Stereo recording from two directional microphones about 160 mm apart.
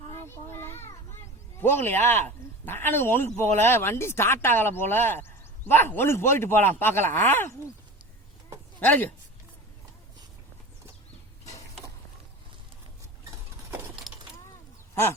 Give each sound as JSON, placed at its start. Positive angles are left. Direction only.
{"t": 0.1, "sound": "children playing", "side_deg": 15}
{"t": 1.6, "sound": "speech", "side_deg": 15}
{"t": 8.8, "sound": "speech", "side_deg": 10}
{"t": 13.7, "sound": "a sound", "side_deg": -15}